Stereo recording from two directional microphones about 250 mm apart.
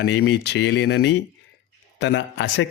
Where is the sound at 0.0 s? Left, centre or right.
Left.